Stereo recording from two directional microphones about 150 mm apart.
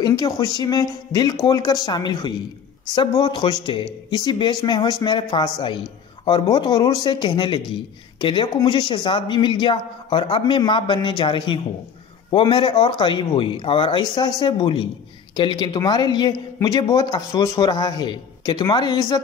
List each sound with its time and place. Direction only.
0.0 s speech: 25° left (ahead or behind)